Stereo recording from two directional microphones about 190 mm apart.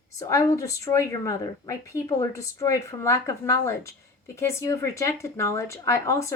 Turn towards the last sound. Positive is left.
turn(degrees=15)  # may be behind; listen again after turning